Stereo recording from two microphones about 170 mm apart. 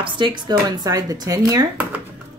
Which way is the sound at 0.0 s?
25° right (ahead or behind).